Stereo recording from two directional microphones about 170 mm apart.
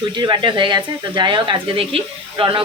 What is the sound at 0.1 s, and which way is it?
Speech, 25° right (ahead or behind).